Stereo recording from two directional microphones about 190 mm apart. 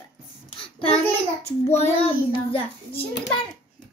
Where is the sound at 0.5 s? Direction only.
30° left (ahead or behind).